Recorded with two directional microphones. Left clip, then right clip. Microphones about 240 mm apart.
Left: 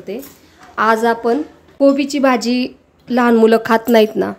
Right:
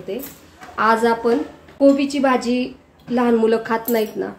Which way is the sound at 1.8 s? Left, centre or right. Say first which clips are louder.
Left 3 dB; left.